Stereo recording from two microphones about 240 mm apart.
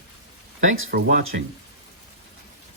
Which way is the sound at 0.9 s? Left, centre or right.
Right.